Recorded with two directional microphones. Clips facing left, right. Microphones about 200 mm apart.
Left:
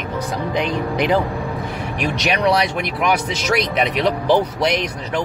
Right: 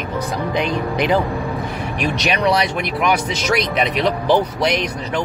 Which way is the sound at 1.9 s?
5° left (ahead or behind).